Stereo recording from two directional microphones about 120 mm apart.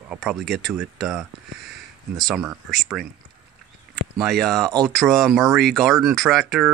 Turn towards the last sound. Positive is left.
turn(degrees=0)  # may be behind; listen again after turning